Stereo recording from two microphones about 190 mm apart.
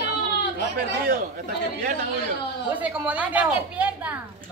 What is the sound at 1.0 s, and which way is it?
Speech, 45° right (ahead or behind).